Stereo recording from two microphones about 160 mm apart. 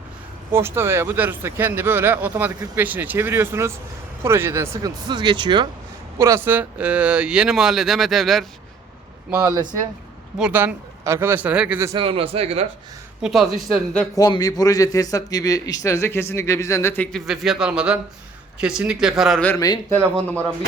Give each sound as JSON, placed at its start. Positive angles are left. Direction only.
{"t": 0.5, "sound": "speech", "side_deg": -15}
{"t": 6.1, "sound": "speech", "side_deg": -15}
{"t": 10.3, "sound": "speech", "side_deg": -5}
{"t": 11.9, "sound": "a man's voice", "side_deg": -35}
{"t": 13.2, "sound": "speech", "side_deg": 0}
{"t": 14.2, "sound": "a man's voice", "side_deg": 25}
{"t": 17.1, "sound": "speech", "side_deg": 0}
{"t": 19.5, "sound": "a man's voice", "side_deg": 20}